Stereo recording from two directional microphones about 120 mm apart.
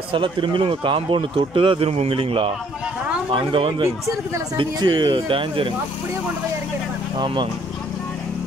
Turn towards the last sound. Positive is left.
turn(degrees=-40)  # may be behind; listen again after turning